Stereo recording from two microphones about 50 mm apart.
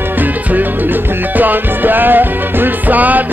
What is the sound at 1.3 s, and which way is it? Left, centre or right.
Music, right.